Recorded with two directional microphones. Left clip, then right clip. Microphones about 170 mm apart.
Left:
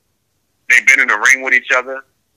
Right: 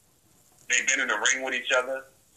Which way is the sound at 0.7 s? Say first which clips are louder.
Left 15 dB; 35° left (ahead or behind).